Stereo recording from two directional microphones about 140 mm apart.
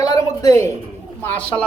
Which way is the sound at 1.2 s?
10° left (ahead or behind).